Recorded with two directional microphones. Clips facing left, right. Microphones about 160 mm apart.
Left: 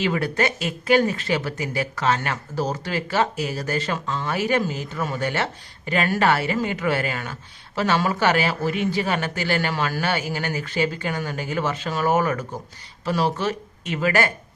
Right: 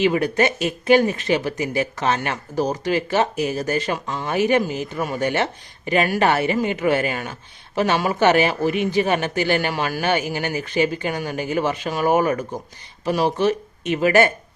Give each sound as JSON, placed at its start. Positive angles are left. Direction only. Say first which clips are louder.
{"t": 0.0, "sound": "speech", "louder": "right 4 dB", "side_deg": -20}